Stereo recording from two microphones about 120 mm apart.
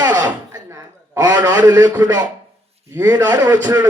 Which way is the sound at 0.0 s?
35° right (ahead or behind).